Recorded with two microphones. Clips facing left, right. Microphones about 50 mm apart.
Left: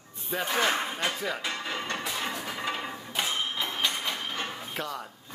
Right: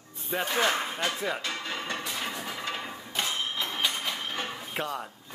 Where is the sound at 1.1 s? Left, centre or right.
Centre.